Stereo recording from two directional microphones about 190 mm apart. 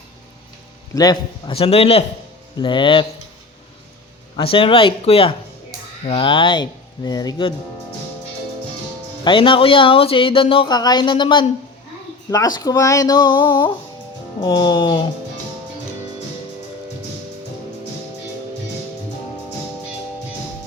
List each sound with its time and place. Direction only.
0.9 s a man's voice: 20° left (ahead or behind)
4.4 s speech: 30° left (ahead or behind)
9.2 s speech: 25° left (ahead or behind)